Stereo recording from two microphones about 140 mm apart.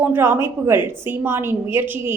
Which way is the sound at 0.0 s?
15° right (ahead or behind).